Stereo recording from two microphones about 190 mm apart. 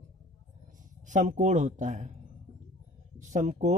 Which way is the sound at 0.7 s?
40° right (ahead or behind).